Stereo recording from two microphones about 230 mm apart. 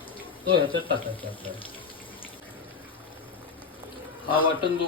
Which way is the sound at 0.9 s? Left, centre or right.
Centre.